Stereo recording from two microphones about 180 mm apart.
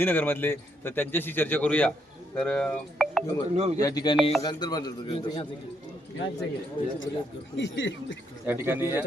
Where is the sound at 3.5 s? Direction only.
35° right (ahead or behind).